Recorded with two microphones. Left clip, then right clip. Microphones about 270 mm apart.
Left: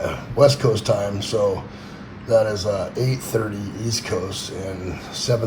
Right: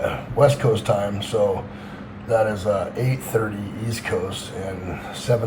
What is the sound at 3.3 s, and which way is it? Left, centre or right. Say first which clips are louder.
Speech: right 1 dB; left.